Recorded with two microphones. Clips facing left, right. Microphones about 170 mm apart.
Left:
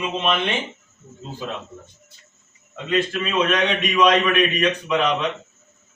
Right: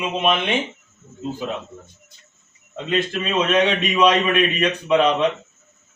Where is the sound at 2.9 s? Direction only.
25° right (ahead or behind).